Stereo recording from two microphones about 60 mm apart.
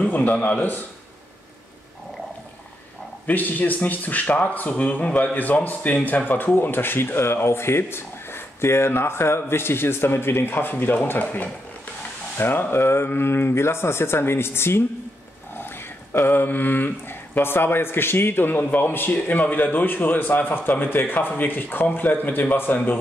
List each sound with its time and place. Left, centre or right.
0.1 s a man's voice: left
3.3 s a man's voice: left
16.1 s speech: left